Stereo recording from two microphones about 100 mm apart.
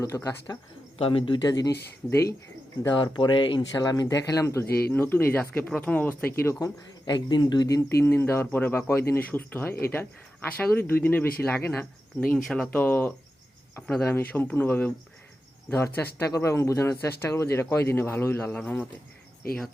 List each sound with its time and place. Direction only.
0.0 s speech: 35° left (ahead or behind)
0.9 s speech: 65° left (ahead or behind)
1.4 s speech: 40° left (ahead or behind)
2.9 s speech: 50° left (ahead or behind)
3.7 s speech: 40° left (ahead or behind); by 6.5 s 20° left (ahead or behind)
7.0 s speech: 45° left (ahead or behind); by 12.4 s 15° left (ahead or behind)
12.4 s speech: 5° left (ahead or behind)
12.7 s speech: 20° left (ahead or behind)
13.8 s speech: 10° left (ahead or behind)
14.2 s speech: 20° left (ahead or behind)
16.2 s speech: 30° left (ahead or behind); by 18.9 s 15° left (ahead or behind)